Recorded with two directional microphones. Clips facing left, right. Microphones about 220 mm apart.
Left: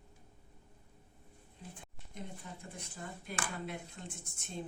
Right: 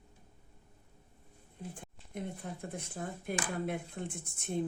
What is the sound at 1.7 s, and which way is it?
A woman's voice, 55° right (ahead or behind).